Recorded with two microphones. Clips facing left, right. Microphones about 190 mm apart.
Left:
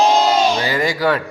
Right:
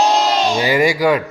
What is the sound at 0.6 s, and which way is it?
Speech, 15° right (ahead or behind).